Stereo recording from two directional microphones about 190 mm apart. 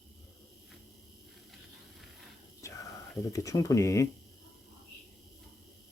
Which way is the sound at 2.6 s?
15° left (ahead or behind).